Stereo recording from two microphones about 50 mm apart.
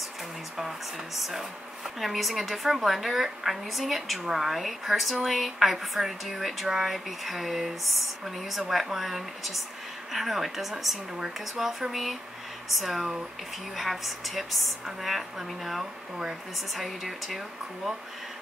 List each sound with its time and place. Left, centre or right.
0.6 s a woman's voice: centre